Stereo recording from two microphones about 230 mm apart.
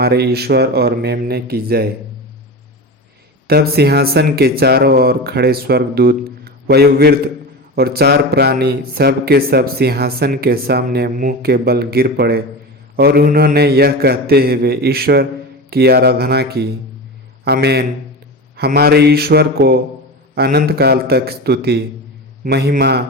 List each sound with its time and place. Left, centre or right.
0.0 s speech: right
3.4 s a man's voice: right